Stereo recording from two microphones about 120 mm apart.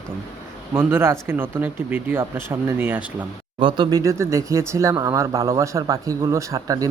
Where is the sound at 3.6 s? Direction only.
40° right (ahead or behind).